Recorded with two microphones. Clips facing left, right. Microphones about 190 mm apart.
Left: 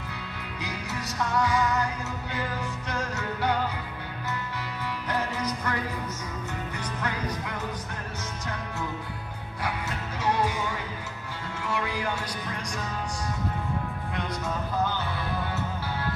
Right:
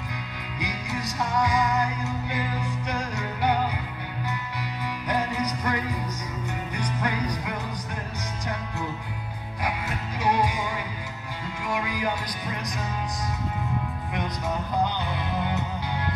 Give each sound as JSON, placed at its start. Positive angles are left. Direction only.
{"t": 0.6, "sound": "music", "side_deg": -15}
{"t": 6.8, "sound": "music", "side_deg": -15}
{"t": 9.6, "sound": "music", "side_deg": -15}
{"t": 14.8, "sound": "music", "side_deg": -15}